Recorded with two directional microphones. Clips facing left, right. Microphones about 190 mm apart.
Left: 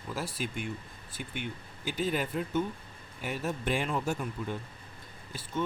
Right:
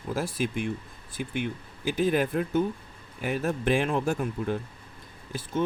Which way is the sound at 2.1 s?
50° right (ahead or behind).